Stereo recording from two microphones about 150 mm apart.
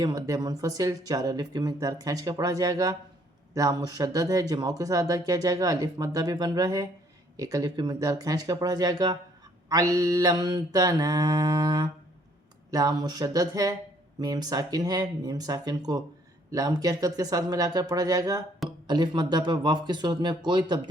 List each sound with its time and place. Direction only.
0.0 s speech: 25° right (ahead or behind)